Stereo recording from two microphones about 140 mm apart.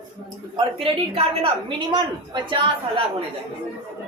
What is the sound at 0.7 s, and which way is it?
A woman's voice, 40° right (ahead or behind).